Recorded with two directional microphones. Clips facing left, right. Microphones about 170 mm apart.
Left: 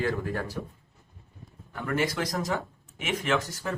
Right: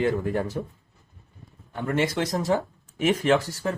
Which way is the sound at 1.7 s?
25° right (ahead or behind).